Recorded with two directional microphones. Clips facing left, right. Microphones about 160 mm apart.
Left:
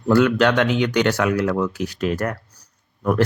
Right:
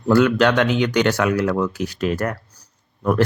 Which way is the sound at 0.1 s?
35° right (ahead or behind).